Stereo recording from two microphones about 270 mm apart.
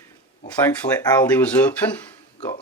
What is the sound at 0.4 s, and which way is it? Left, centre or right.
Speech, centre.